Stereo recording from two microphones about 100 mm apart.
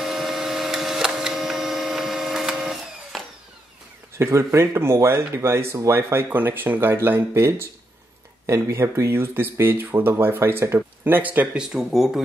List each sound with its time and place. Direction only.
0.0 s printer: 5° right (ahead or behind)
4.2 s speech: 25° right (ahead or behind); by 12.2 s 5° right (ahead or behind)